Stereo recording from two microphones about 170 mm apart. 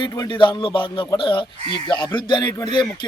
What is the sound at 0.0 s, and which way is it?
A man's voice, 25° left (ahead or behind).